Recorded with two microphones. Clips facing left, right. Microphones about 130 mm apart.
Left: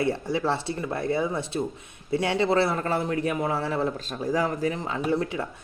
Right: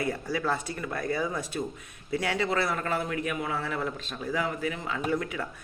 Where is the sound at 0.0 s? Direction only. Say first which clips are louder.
Left 4 dB; 25° left (ahead or behind).